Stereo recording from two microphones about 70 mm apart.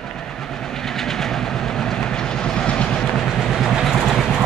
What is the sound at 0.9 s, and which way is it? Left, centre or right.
Train, centre.